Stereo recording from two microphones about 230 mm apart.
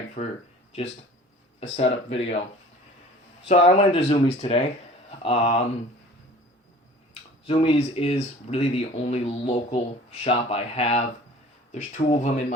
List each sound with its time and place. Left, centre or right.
0.2 s speech: left
1.7 s speech: left
3.5 s speech: left
7.1 s speech: left